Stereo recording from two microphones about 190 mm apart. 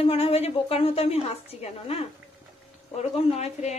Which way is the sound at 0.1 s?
30° left (ahead or behind).